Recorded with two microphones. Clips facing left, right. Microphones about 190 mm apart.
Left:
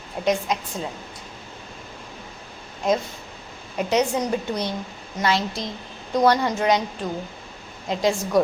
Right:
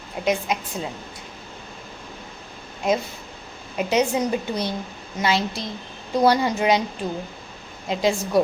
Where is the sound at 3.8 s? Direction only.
10° right (ahead or behind).